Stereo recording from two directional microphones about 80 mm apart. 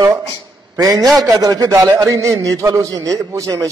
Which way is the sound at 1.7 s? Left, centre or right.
Right.